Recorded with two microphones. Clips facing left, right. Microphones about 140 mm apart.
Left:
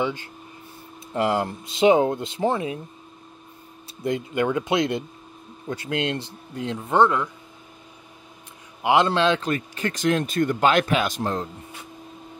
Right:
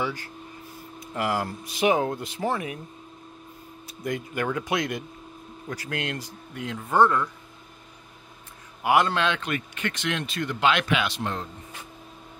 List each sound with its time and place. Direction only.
0.0 s speech: 25° left (ahead or behind)
3.8 s speech: 25° left (ahead or behind)
8.8 s a man's voice: 25° left (ahead or behind)